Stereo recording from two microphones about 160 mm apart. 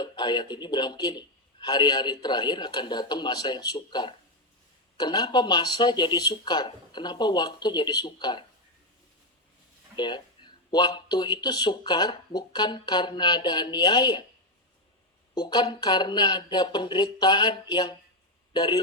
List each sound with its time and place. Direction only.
0.0 s speech: 30° left (ahead or behind)
9.9 s speech: 30° left (ahead or behind)
15.4 s a man's voice: 25° left (ahead or behind)